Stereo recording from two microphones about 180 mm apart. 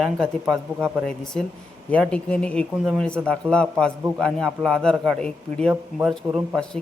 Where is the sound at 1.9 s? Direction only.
5° left (ahead or behind).